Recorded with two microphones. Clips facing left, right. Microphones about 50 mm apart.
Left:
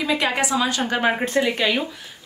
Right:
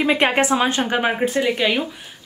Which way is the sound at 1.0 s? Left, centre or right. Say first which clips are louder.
Left 2 dB; centre.